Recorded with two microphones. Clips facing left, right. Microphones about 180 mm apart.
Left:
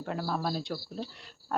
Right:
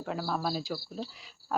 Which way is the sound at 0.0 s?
Centre (ahead or behind).